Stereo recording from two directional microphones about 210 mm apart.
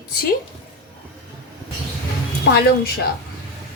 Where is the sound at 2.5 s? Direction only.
50° left (ahead or behind).